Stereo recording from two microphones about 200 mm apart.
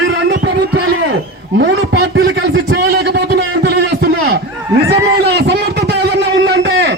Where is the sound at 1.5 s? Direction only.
55° right (ahead or behind).